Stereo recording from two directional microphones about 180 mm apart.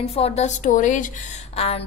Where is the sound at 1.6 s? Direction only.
35° left (ahead or behind).